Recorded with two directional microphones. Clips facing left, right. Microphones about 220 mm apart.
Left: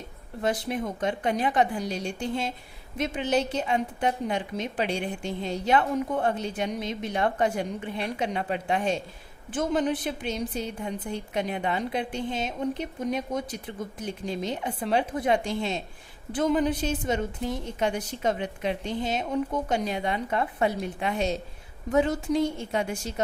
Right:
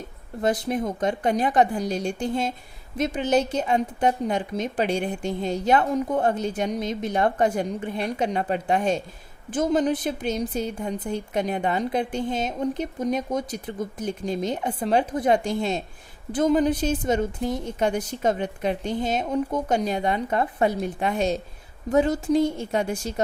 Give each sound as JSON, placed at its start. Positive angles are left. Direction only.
{"t": 0.4, "sound": "a woman's voice", "side_deg": -45}